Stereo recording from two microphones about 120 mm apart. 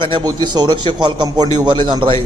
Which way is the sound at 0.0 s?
40° right (ahead or behind).